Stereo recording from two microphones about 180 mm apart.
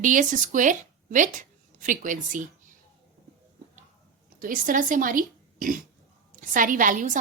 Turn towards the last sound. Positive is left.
turn(degrees=-45)  # may be behind; listen again after turning